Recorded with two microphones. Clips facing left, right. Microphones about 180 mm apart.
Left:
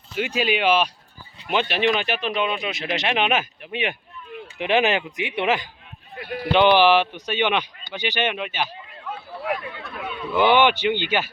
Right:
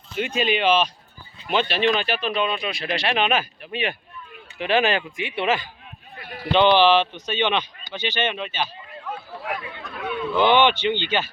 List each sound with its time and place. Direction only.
0.2 s speech: 5° left (ahead or behind)
10.0 s speech: 10° left (ahead or behind)